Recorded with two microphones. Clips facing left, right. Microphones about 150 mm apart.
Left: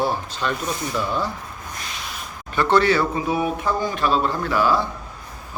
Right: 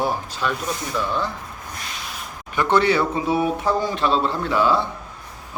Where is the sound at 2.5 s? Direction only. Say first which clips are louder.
Left 1 dB; 15° right (ahead or behind).